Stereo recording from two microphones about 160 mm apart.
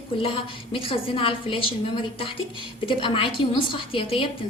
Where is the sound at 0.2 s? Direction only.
35° left (ahead or behind).